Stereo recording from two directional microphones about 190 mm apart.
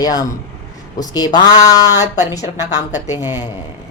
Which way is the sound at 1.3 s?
20° left (ahead or behind).